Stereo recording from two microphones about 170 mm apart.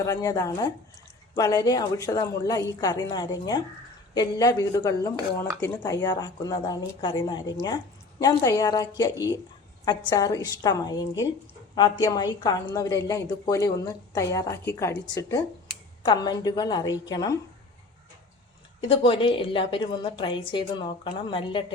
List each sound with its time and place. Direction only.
0.0 s a woman's voice: 20° left (ahead or behind)
18.8 s a woman's voice: 30° left (ahead or behind)